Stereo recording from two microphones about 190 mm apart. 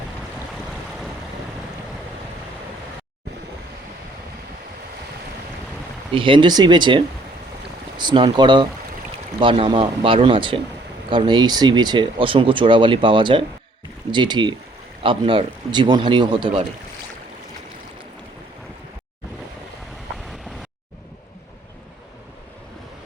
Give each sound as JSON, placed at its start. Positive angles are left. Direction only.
{"t": 0.5, "sound": "boat", "side_deg": 0}
{"t": 6.1, "sound": "speech", "side_deg": -25}